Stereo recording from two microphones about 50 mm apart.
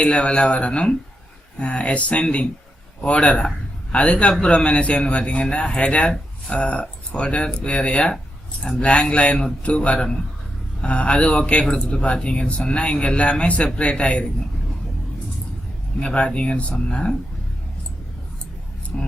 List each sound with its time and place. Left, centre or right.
0.0 s a man's voice: left
16.0 s a man's voice: centre
18.9 s speech: centre